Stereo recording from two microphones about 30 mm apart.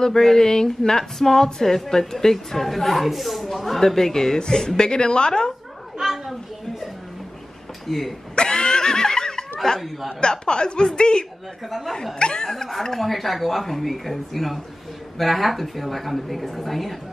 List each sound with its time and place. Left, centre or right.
0.0 s a woman's voice: centre
5.9 s children playing: centre
7.9 s speech: centre
8.4 s neigh: left
9.8 s speech: centre
10.2 s a woman's voice: left
13.0 s speech: centre